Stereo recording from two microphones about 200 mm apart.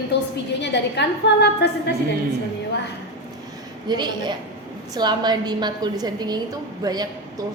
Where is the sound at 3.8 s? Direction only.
20° right (ahead or behind).